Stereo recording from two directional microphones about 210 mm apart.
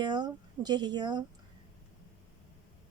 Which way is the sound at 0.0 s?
20° right (ahead or behind).